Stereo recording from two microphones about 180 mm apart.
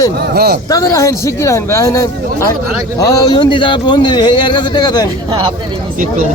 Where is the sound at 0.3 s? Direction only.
60° right (ahead or behind).